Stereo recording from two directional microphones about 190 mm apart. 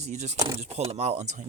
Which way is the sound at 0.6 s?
35° right (ahead or behind).